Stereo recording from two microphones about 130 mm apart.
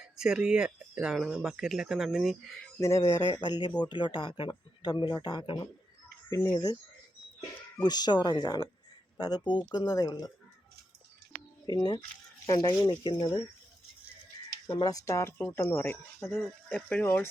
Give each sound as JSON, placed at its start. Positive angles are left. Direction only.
{"t": 0.2, "sound": "speech", "side_deg": -5}
{"t": 2.8, "sound": "speech", "side_deg": 25}
{"t": 3.4, "sound": "speech", "side_deg": 35}
{"t": 6.3, "sound": "speech", "side_deg": 25}
{"t": 7.8, "sound": "speech", "side_deg": 30}
{"t": 11.6, "sound": "speech", "side_deg": 30}
{"t": 12.8, "sound": "speech", "side_deg": 35}
{"t": 14.7, "sound": "speech", "side_deg": 35}